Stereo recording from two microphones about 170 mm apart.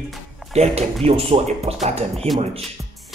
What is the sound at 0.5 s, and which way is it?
Speech, 35° right (ahead or behind).